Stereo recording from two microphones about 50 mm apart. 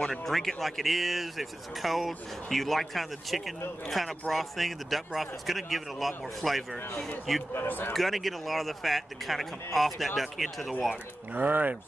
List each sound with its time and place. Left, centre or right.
0.0 s speech: centre
7.5 s speech: left
7.9 s speech: centre
11.3 s speech: right